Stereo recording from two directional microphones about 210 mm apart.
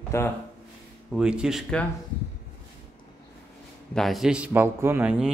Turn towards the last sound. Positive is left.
turn(degrees=-5)  # may be behind; listen again after turning